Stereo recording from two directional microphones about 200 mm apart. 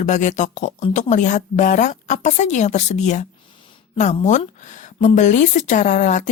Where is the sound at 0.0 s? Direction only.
40° left (ahead or behind).